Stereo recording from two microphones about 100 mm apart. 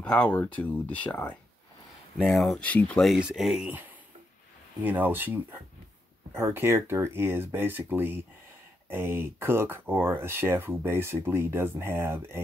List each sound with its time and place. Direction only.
0.0 s speech: 10° left (ahead or behind)
2.1 s speech: centre (ahead or behind)
2.6 s speech: 15° left (ahead or behind)
3.2 s speech: 5° right (ahead or behind)
4.8 s speech: 20° right (ahead or behind)